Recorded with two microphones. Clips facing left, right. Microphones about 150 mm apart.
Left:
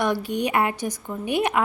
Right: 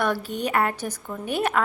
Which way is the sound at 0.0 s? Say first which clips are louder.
Left 2 dB; 15° left (ahead or behind).